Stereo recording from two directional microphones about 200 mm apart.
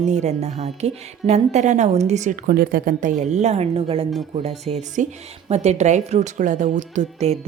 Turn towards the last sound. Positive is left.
turn(degrees=-35)  # may be behind; listen again after turning